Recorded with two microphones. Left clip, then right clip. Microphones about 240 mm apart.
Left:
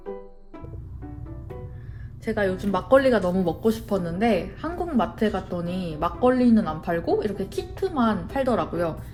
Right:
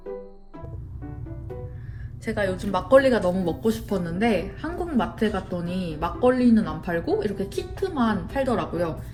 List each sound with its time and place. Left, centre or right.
2.2 s speech: left